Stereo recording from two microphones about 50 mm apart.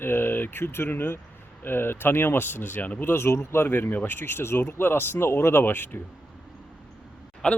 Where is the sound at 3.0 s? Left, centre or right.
Left.